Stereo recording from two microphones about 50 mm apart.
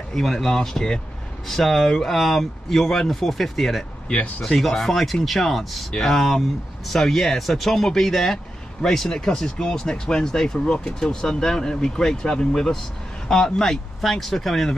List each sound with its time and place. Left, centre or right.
0.1 s speech: centre
4.1 s speech: centre
4.6 s speech: centre